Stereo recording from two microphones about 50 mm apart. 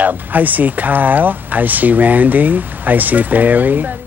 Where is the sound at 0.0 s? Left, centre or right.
Right.